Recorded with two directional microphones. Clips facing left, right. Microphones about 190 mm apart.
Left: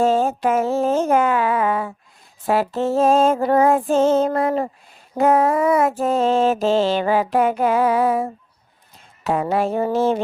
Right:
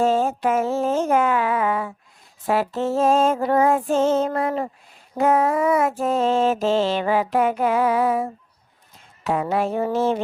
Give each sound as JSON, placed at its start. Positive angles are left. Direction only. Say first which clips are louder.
{"t": 0.0, "sound": "mantra", "louder": "left 2 dB", "side_deg": 35}